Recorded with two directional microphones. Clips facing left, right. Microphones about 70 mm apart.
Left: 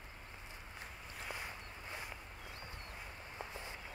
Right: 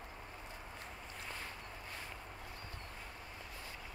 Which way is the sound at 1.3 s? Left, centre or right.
Centre.